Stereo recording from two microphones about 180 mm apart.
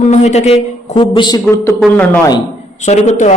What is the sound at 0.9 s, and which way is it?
Speech, 25° left (ahead or behind).